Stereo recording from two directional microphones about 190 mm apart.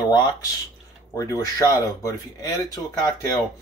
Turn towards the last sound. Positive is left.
turn(degrees=20)  # may be behind; listen again after turning